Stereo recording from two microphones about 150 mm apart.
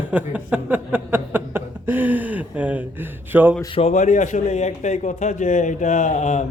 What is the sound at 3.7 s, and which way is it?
A man's voice, 45° left (ahead or behind).